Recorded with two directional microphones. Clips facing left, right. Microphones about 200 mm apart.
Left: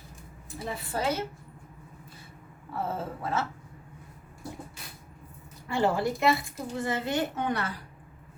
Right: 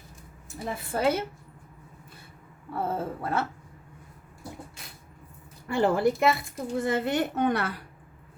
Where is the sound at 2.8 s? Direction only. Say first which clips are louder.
Right 3 dB; 55° right (ahead or behind).